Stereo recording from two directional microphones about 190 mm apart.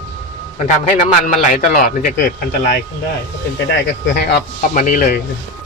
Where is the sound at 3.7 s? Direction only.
60° left (ahead or behind).